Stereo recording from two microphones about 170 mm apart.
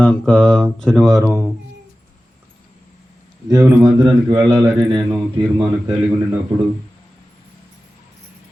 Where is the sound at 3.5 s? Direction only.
20° right (ahead or behind).